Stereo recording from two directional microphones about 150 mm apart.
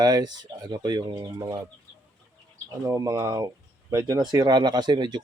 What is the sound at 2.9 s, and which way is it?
Speech, 20° right (ahead or behind).